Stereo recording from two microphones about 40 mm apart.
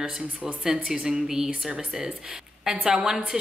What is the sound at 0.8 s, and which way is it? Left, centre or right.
Speech, centre.